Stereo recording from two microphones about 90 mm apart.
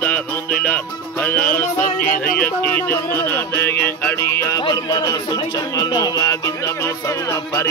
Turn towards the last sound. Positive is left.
turn(degrees=30)  # may be behind; listen again after turning